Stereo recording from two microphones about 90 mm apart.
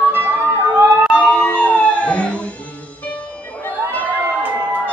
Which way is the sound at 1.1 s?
15° left (ahead or behind).